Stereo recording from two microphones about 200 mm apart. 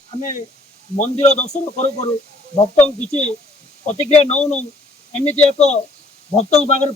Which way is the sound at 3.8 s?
35° left (ahead or behind).